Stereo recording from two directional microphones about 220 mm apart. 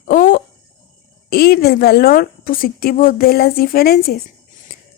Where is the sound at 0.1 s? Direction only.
40° left (ahead or behind).